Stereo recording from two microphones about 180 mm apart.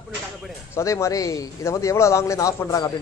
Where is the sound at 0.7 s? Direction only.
15° left (ahead or behind).